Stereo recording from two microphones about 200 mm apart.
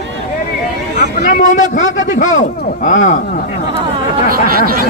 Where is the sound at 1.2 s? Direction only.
40° left (ahead or behind).